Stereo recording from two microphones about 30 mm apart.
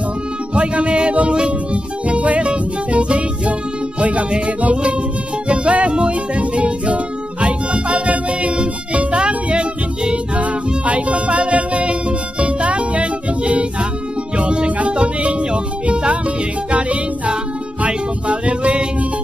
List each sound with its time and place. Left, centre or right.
0.6 s music: right
2.0 s music: right
9.5 s music: right
17.8 s music: right